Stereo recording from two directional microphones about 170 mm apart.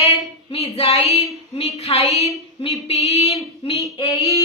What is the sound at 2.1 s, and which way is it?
Speech, 20° right (ahead or behind).